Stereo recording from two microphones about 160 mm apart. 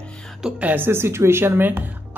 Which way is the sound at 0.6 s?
10° right (ahead or behind).